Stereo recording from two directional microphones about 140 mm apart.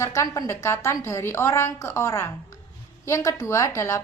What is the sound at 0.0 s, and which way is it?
A woman's voice, 20° left (ahead or behind).